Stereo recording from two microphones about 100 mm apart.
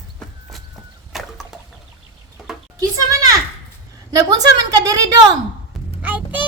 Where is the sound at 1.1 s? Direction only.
Centre (ahead or behind).